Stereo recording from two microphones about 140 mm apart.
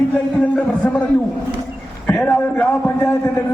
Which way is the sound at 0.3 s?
10° left (ahead or behind).